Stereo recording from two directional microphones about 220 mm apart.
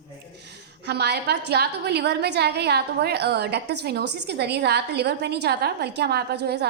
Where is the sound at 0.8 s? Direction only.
50° right (ahead or behind).